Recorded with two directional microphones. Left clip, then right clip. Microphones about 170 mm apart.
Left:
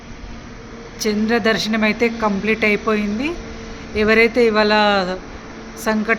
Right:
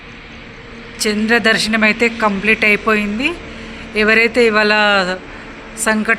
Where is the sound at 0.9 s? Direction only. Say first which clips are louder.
Right 4 dB; centre (ahead or behind).